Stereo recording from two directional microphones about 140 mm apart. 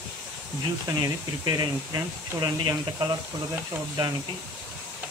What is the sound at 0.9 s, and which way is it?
Speech, 25° right (ahead or behind).